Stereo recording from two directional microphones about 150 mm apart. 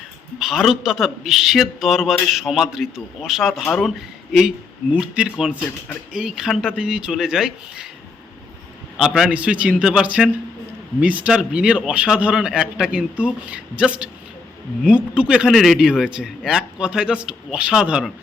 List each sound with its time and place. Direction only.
0.3 s a man's voice: centre (ahead or behind)
9.0 s a man's voice: 5° right (ahead or behind)